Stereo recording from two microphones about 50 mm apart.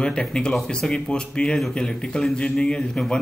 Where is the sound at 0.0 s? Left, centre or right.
Centre.